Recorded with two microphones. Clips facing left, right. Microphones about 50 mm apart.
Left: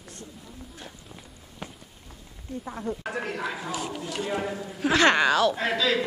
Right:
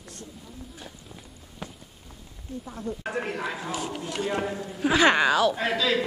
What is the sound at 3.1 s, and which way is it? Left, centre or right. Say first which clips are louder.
A woman's voice: right 1 dB; centre.